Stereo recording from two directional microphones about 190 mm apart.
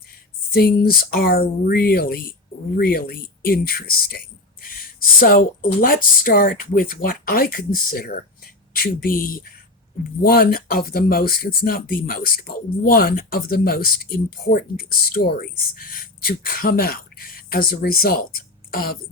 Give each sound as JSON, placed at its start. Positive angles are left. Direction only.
{"t": 0.5, "sound": "speech", "side_deg": 50}